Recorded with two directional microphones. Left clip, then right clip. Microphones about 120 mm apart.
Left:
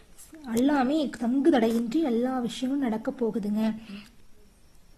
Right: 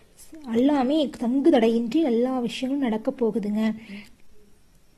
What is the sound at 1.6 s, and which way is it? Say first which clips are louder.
Speech: right 4 dB; 60° left (ahead or behind).